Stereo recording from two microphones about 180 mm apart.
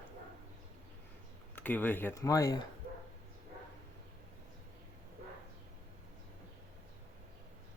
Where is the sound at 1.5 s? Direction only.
10° left (ahead or behind).